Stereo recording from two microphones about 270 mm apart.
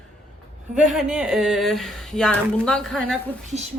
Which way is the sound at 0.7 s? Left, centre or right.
Centre.